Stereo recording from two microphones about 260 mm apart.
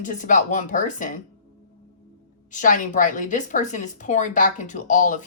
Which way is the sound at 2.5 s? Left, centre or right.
Left.